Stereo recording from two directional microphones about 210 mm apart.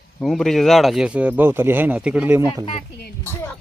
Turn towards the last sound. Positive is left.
turn(degrees=10)  # may be behind; listen again after turning